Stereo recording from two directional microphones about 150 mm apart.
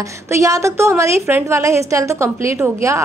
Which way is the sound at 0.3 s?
20° right (ahead or behind).